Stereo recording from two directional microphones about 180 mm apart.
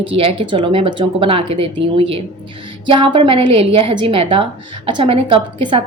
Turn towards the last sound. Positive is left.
turn(degrees=-30)  # may be behind; listen again after turning